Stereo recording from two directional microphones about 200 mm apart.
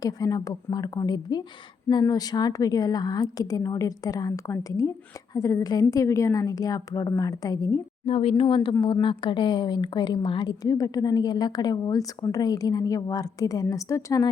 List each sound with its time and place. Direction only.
0.0 s a woman's voice: 15° left (ahead or behind)
8.0 s a woman's voice: 30° left (ahead or behind)